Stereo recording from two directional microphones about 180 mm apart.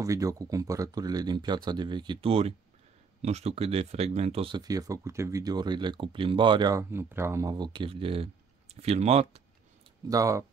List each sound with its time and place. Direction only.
0.0 s speech: 20° right (ahead or behind); by 9.4 s 35° right (ahead or behind)
10.0 s speech: 20° right (ahead or behind)